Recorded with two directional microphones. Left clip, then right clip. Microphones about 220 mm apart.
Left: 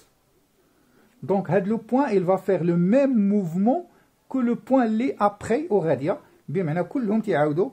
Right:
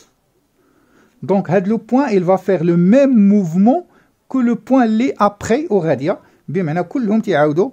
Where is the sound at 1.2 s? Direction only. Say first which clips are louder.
Right 7 dB; 45° right (ahead or behind).